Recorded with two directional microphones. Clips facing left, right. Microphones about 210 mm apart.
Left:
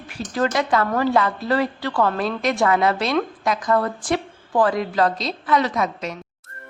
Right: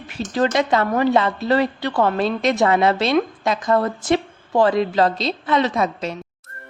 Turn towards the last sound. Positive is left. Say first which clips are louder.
# right 2 dB
turn(degrees=-30)  # may be behind; listen again after turning